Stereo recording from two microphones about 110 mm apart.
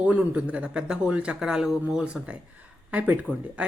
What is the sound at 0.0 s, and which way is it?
Speech, 15° right (ahead or behind).